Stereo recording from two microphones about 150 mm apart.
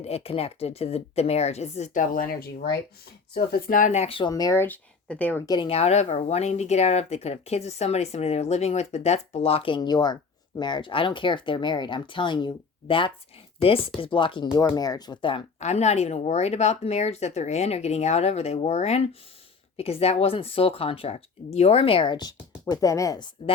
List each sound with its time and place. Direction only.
0.0 s speech: 40° left (ahead or behind)
4.3 s speech: 25° left (ahead or behind)
5.5 s speech: 35° left (ahead or behind)
15.6 s speech: 50° left (ahead or behind); by 23.3 s 25° left (ahead or behind)